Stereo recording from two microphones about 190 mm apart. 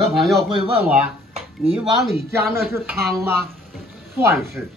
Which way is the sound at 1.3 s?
30° right (ahead or behind).